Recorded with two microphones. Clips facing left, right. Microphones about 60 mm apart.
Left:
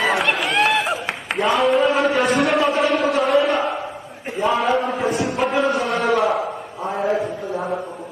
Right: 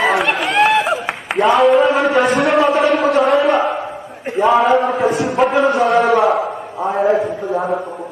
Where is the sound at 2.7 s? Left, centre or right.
Centre.